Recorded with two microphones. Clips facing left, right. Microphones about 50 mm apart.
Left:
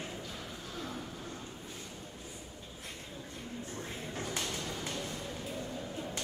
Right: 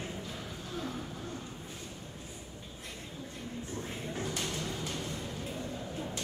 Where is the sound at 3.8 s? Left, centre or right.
Right.